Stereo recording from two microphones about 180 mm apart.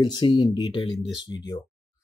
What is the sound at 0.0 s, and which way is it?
Speech, 25° left (ahead or behind).